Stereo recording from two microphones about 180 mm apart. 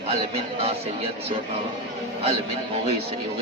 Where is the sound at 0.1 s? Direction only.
35° right (ahead or behind).